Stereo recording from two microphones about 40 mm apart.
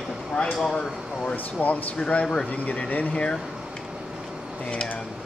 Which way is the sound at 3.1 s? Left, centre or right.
Left.